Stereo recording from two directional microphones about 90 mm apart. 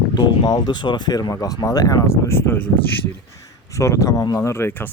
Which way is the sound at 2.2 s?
25° left (ahead or behind).